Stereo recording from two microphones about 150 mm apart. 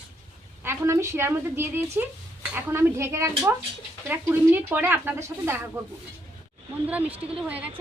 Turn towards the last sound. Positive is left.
turn(degrees=-10)  # may be behind; listen again after turning